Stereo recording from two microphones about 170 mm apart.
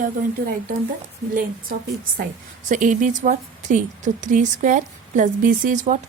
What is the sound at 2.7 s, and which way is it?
A woman's voice, 50° right (ahead or behind).